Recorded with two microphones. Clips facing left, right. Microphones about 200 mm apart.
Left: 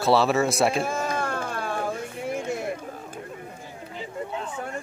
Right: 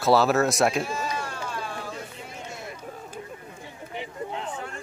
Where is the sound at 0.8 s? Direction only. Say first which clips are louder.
Left 3 dB; 50° left (ahead or behind).